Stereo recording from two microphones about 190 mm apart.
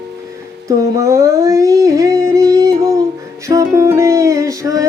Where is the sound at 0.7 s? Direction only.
15° right (ahead or behind).